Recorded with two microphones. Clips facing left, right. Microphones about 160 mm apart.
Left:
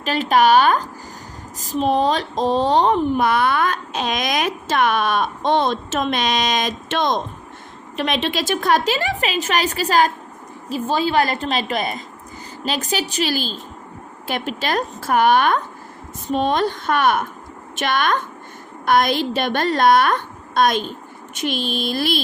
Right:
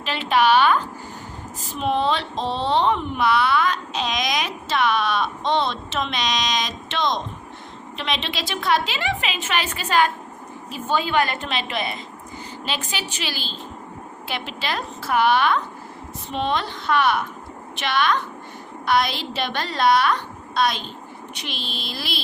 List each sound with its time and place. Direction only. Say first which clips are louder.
0.0 s a woman's voice: left 4 dB; 45° left (ahead or behind)